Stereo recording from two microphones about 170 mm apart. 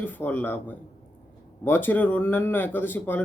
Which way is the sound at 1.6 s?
10° left (ahead or behind).